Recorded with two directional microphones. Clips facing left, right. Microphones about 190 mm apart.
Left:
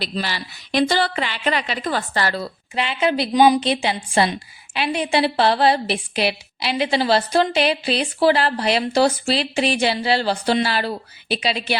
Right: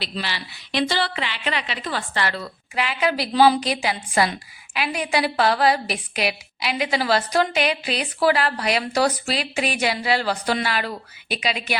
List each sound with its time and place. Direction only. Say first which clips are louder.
0.0 s a woman's voice: left 4 dB; 45° left (ahead or behind)
2.7 s a woman's voice: left 3 dB; 25° left (ahead or behind)